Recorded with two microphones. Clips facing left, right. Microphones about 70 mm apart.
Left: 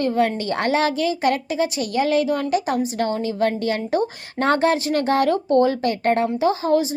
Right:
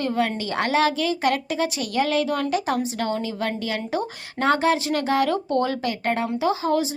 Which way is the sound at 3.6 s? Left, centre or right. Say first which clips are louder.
Left 5 dB; left.